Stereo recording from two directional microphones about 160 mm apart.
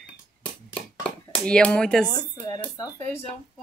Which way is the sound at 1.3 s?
5° left (ahead or behind).